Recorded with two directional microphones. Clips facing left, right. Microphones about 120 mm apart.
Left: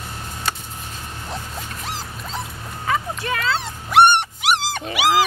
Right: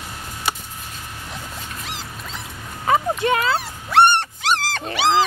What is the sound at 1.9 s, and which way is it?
Rodents, 35° left (ahead or behind).